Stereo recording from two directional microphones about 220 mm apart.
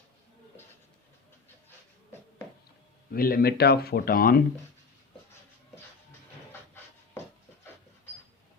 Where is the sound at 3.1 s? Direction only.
40° left (ahead or behind).